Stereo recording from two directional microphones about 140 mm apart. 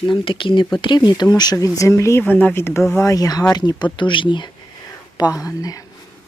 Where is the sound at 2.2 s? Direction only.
10° left (ahead or behind); by 5.8 s 25° left (ahead or behind).